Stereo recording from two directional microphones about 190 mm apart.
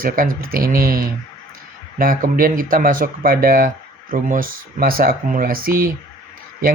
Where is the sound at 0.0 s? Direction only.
50° right (ahead or behind).